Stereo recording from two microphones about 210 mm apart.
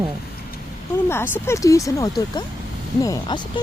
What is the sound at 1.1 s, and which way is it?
Speech, 10° left (ahead or behind).